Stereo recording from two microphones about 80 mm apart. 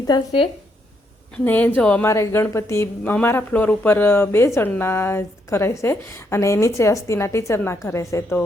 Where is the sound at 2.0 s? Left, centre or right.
Left.